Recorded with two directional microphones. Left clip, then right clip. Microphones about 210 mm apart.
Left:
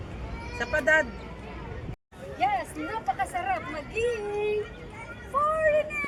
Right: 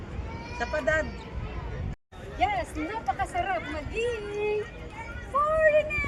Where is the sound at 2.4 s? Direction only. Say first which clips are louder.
Even; 5° right (ahead or behind).